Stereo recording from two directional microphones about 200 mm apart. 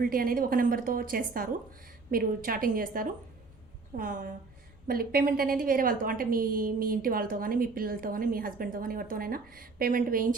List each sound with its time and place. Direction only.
0.0 s a woman's voice: 45° right (ahead or behind)